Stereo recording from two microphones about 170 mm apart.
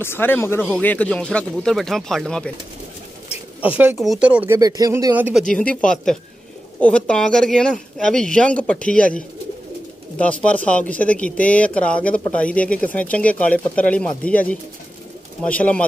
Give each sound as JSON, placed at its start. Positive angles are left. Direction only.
{"t": 0.0, "sound": "speech", "side_deg": 15}
{"t": 3.6, "sound": "speech", "side_deg": -10}
{"t": 4.6, "sound": "speech", "side_deg": -20}
{"t": 5.5, "sound": "speech", "side_deg": 5}